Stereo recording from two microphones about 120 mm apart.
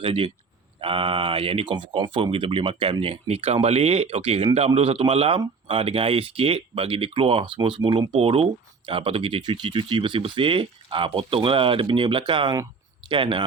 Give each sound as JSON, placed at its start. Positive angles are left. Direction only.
{"t": 0.0, "sound": "speech", "side_deg": -50}